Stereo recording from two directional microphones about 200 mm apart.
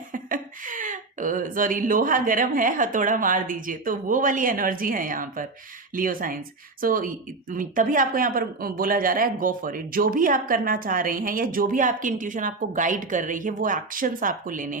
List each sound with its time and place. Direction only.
0.1 s speech: 40° right (ahead or behind)